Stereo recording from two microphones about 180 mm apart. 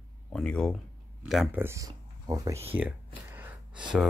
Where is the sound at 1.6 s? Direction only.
15° right (ahead or behind).